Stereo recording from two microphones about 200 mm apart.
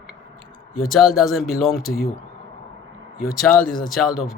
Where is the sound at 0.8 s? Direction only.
Centre (ahead or behind).